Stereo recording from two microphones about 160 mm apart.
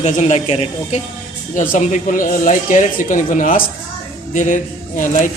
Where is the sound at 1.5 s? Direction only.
50° left (ahead or behind).